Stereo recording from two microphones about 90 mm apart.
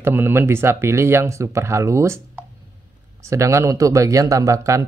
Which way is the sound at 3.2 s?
35° right (ahead or behind).